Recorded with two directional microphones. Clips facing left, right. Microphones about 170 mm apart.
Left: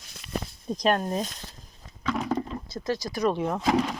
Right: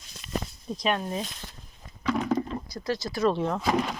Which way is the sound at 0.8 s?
40° left (ahead or behind).